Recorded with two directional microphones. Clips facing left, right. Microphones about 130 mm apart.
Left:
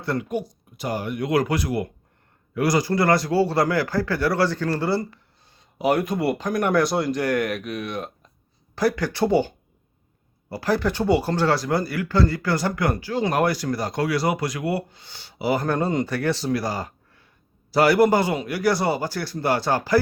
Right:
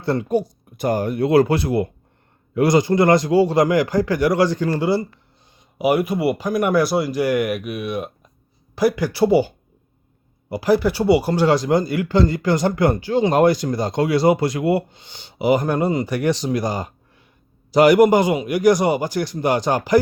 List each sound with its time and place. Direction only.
0.0 s speech: 30° right (ahead or behind); by 9.5 s 10° right (ahead or behind)
10.5 s speech: 10° right (ahead or behind)